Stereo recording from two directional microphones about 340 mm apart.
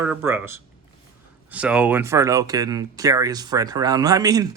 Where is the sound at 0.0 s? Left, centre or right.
Centre.